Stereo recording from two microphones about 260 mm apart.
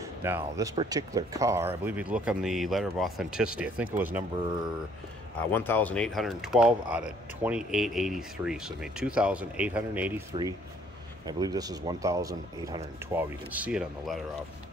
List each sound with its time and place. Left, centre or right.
0.2 s speech: centre
5.5 s speech: centre
11.2 s speech: centre